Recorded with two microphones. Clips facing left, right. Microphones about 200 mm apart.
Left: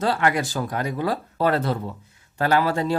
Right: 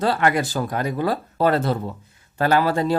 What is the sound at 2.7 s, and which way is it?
Speech, 35° right (ahead or behind).